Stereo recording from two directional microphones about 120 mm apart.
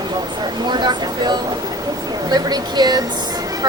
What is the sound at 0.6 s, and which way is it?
Speech, 35° right (ahead or behind).